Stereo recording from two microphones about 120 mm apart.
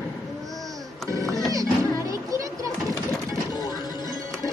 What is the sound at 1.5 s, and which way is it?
Music, 30° right (ahead or behind).